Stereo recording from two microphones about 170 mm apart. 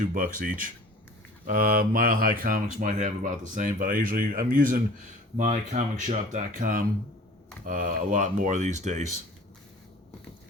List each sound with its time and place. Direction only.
0.0 s speech: 55° right (ahead or behind)